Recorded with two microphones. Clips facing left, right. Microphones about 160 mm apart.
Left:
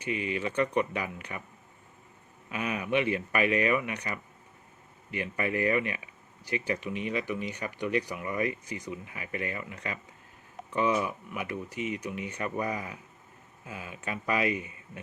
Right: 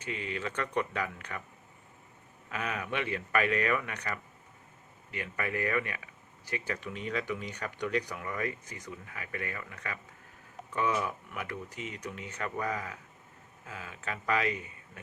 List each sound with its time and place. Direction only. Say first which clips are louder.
0.0 s speech: left 5 dB; 15° left (ahead or behind)
2.5 s speech: left 5 dB; 15° left (ahead or behind)